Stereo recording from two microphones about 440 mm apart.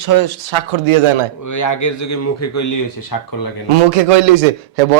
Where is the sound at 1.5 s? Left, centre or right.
Left.